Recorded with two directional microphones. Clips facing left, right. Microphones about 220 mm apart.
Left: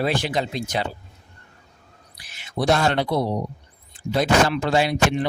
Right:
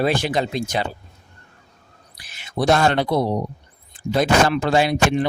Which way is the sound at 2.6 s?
50° right (ahead or behind).